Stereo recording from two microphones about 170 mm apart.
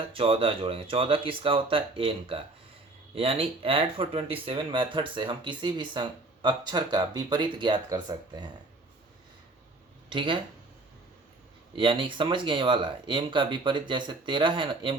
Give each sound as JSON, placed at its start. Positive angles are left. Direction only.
{"t": 0.1, "sound": "speech", "side_deg": -30}
{"t": 10.1, "sound": "speech", "side_deg": -30}
{"t": 11.7, "sound": "speech", "side_deg": -30}